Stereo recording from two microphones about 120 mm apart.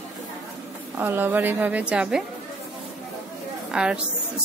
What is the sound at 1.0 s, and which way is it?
A woman's voice, 15° right (ahead or behind).